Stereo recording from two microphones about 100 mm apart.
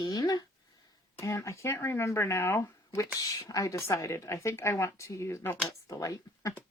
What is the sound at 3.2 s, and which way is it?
A woman's voice, 35° left (ahead or behind).